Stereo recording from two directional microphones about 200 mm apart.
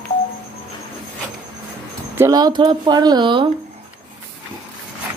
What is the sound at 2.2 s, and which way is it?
Speech, 20° right (ahead or behind).